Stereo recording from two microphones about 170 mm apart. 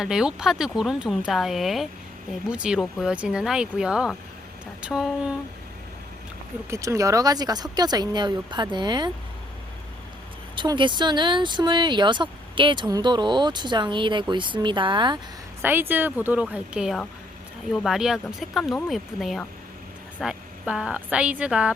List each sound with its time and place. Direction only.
0.0 s speech: 5° right (ahead or behind)
6.7 s speech: 20° right (ahead or behind)
10.5 s speech: 30° right (ahead or behind)
15.6 s a woman's voice: 10° right (ahead or behind)